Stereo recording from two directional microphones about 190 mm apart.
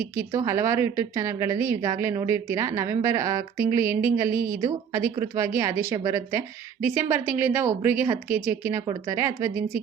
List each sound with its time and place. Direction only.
0.2 s a woman's voice: 15° right (ahead or behind)